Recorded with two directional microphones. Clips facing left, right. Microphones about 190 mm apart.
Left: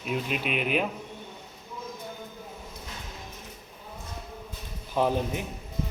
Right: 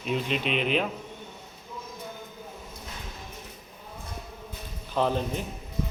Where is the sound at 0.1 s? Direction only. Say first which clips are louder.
Right 2 dB; 5° left (ahead or behind).